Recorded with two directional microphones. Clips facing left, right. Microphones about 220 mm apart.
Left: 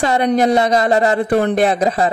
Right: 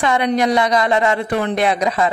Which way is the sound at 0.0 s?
40° left (ahead or behind).